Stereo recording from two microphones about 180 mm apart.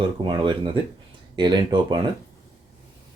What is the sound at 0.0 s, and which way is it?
Speech, 30° right (ahead or behind).